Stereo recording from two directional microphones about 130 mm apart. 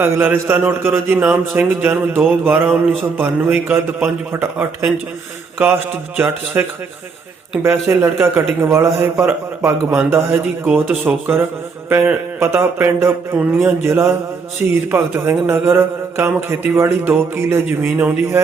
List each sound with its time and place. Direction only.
0.0 s a man's voice: 15° right (ahead or behind)